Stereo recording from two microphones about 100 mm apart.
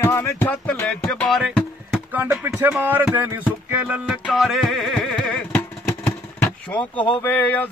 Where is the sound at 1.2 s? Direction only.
Centre (ahead or behind).